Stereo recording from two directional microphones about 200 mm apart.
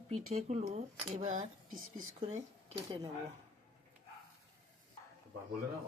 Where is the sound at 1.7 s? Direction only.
90° right.